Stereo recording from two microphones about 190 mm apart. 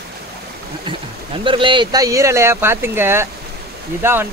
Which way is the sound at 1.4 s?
25° right (ahead or behind).